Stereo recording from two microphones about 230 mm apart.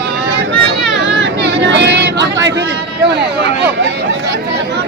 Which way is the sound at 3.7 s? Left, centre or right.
Right.